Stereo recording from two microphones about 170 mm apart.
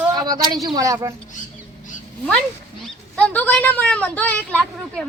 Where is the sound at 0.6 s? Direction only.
20° right (ahead or behind).